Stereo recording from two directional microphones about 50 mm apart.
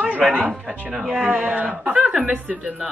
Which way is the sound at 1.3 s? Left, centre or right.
Right.